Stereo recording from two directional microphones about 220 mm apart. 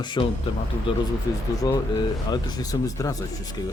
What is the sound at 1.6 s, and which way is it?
Speech, 15° left (ahead or behind).